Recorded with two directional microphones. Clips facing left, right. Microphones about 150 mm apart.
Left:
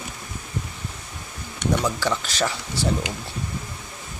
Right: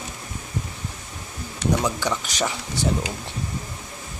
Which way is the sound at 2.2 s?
15° right (ahead or behind).